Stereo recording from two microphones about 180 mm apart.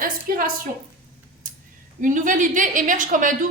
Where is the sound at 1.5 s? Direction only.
50° right (ahead or behind).